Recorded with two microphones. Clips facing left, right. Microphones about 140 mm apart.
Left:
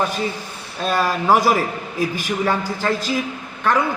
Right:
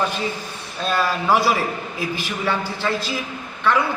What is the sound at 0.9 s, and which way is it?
A man's voice, 40° left (ahead or behind).